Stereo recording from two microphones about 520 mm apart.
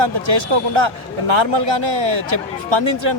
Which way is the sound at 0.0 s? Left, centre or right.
Right.